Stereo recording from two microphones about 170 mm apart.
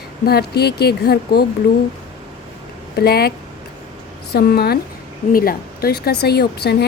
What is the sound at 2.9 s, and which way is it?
Speech, 65° left (ahead or behind).